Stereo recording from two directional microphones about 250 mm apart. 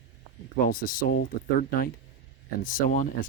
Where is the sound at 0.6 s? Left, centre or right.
Left.